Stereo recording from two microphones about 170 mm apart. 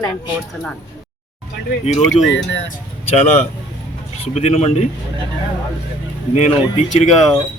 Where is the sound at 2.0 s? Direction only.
Centre (ahead or behind).